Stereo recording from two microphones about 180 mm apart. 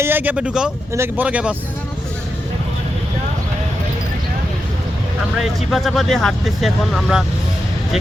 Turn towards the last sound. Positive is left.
turn(degrees=0)  # may be behind; listen again after turning